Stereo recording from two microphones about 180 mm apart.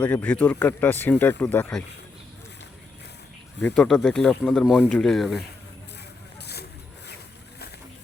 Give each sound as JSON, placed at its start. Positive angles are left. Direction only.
{"t": 0.0, "sound": "speech", "side_deg": 10}
{"t": 3.6, "sound": "speech", "side_deg": 5}
{"t": 6.4, "sound": "vehicle", "side_deg": 65}